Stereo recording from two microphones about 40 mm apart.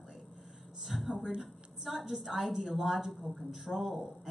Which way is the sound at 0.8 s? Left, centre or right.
Centre.